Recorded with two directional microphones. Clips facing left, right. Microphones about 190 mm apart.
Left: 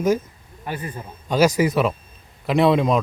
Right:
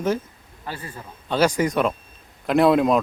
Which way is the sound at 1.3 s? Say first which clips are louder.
Left 2 dB; 10° left (ahead or behind).